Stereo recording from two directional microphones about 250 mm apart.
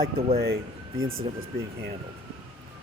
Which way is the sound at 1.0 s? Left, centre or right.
Right.